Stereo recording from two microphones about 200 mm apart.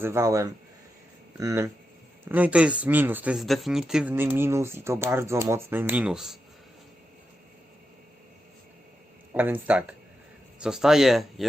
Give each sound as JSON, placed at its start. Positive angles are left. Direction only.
{"t": 0.0, "sound": "speech", "side_deg": -15}
{"t": 9.3, "sound": "speech", "side_deg": -10}